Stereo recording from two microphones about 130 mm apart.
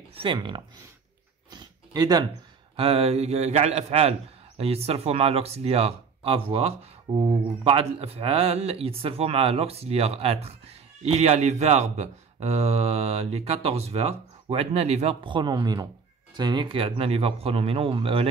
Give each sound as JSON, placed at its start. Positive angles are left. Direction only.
{"t": 0.1, "sound": "speech", "side_deg": -40}
{"t": 1.5, "sound": "a sound", "side_deg": -30}
{"t": 2.7, "sound": "speech", "side_deg": -50}
{"t": 15.2, "sound": "speech", "side_deg": -35}